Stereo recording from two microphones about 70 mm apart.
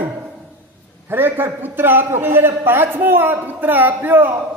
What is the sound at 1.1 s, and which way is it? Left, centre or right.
A man's voice, right.